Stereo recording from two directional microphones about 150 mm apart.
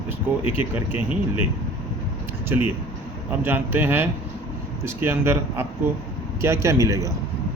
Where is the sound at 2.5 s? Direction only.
15° right (ahead or behind).